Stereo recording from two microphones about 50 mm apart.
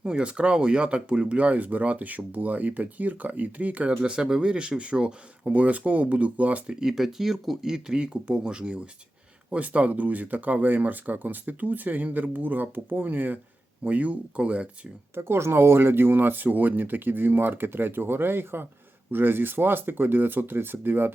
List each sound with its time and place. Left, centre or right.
0.0 s speech: right
6.7 s speech: centre; by 14.7 s right
15.1 s speech: right